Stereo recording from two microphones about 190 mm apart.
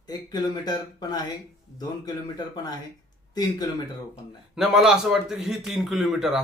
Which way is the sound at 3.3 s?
20° left (ahead or behind).